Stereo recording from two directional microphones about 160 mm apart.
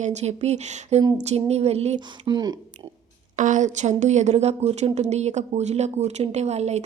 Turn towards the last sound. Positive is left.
turn(degrees=-45)  # may be behind; listen again after turning